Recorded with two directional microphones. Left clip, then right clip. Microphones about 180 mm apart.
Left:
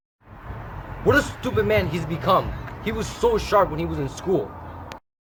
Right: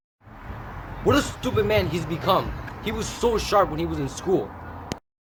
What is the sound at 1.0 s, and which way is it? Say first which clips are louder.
A man's voice: left 2 dB; centre (ahead or behind).